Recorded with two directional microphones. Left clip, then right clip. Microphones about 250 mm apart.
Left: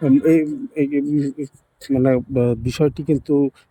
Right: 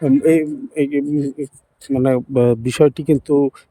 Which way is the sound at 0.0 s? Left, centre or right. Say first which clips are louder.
Right 1 dB; right.